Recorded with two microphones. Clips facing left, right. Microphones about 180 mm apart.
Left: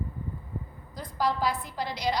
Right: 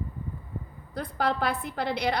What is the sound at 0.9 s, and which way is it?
A woman's voice, 60° right (ahead or behind).